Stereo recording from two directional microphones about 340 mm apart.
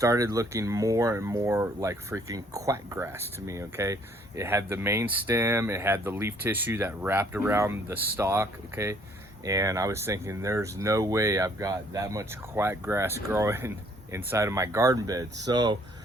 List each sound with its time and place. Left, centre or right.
0.0 s speech: centre